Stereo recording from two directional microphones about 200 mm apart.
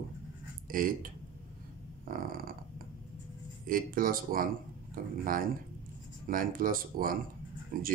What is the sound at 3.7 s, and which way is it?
Speech, 45° right (ahead or behind).